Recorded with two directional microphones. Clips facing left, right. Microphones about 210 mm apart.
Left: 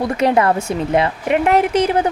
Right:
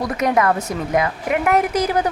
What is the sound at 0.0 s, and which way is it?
A woman's voice, 30° left (ahead or behind).